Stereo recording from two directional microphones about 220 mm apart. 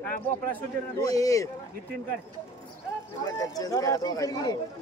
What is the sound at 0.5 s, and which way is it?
A man's voice, 10° left (ahead or behind).